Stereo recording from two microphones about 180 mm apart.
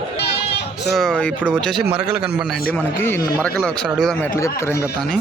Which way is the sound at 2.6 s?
10° left (ahead or behind).